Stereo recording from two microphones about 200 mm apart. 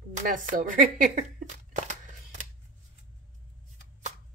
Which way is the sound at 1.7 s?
35° right (ahead or behind).